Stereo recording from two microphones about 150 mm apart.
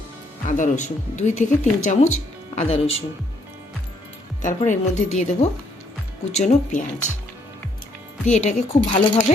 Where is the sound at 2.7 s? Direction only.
40° left (ahead or behind).